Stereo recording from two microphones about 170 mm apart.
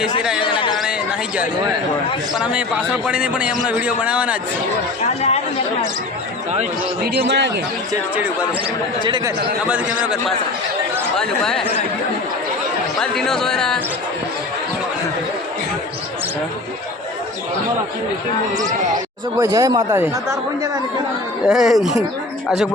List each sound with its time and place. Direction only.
0.4 s a sound: 30° left (ahead or behind)
2.4 s a man's voice: 5° right (ahead or behind)
7.0 s a man's voice: 70° right (ahead or behind)
8.1 s a man's voice: 10° right (ahead or behind)
9.0 s speech: 25° right (ahead or behind)
9.6 s a man's voice: 10° right (ahead or behind)
13.0 s speech: 5° left (ahead or behind)
19.4 s speech: 20° right (ahead or behind)
21.4 s speech: centre (ahead or behind)